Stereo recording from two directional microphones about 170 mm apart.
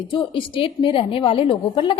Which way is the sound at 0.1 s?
30° left (ahead or behind).